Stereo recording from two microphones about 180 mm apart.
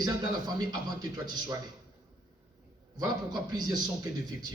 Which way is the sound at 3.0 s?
20° right (ahead or behind).